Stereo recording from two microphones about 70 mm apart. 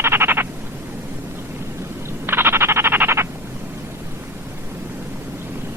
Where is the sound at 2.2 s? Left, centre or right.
Right.